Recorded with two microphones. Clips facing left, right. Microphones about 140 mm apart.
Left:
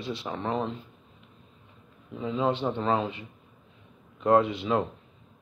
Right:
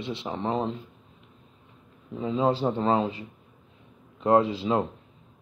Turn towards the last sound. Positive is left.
turn(degrees=-30)  # may be behind; listen again after turning